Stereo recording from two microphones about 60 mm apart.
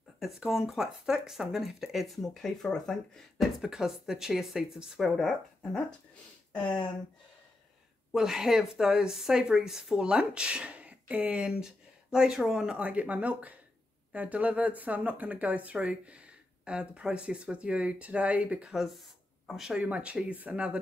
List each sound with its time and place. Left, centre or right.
0.2 s speech: centre
3.3 s a woman's voice: centre
6.5 s speech: centre
8.1 s a woman's voice: centre
18.7 s speech: centre
19.7 s speech: right